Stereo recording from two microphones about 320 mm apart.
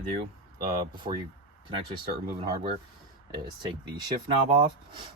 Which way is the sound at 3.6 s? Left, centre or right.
Centre.